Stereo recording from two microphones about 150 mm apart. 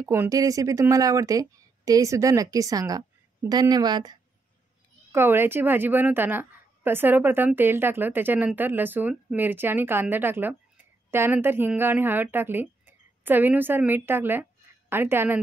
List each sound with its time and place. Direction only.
0.0 s speech: 20° right (ahead or behind)
5.1 s a woman's voice: 15° right (ahead or behind)